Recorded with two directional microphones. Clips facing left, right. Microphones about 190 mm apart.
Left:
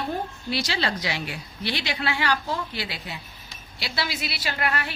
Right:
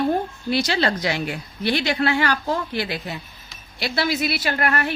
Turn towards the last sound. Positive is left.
turn(degrees=-50)  # may be behind; listen again after turning